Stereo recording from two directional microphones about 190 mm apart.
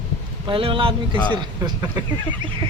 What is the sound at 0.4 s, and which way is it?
Speech, 25° right (ahead or behind).